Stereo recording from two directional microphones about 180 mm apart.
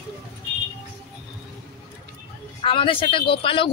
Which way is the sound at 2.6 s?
30° left (ahead or behind).